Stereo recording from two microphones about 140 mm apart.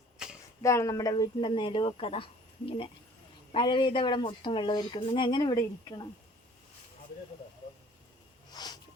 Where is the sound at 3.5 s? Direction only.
35° left (ahead or behind).